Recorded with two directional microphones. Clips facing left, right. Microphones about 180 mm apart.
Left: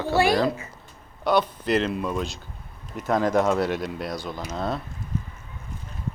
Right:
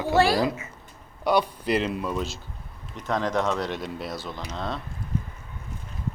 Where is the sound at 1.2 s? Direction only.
10° right (ahead or behind).